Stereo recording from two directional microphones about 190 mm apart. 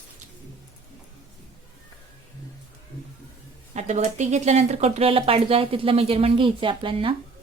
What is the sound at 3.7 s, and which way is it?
Speech, 35° right (ahead or behind).